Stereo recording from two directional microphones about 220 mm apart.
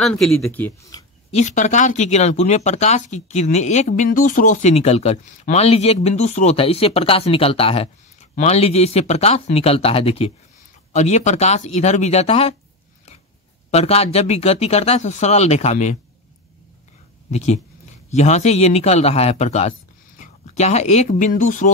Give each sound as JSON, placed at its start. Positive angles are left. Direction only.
{"t": 0.0, "sound": "speech", "side_deg": 5}
{"t": 1.3, "sound": "speech", "side_deg": 35}
{"t": 13.7, "sound": "speech", "side_deg": 30}
{"t": 17.3, "sound": "speech", "side_deg": 30}